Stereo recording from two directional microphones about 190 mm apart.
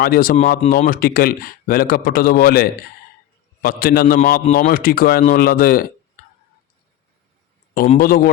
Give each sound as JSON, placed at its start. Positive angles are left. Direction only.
{"t": 0.0, "sound": "speech", "side_deg": 50}
{"t": 7.7, "sound": "speech", "side_deg": 45}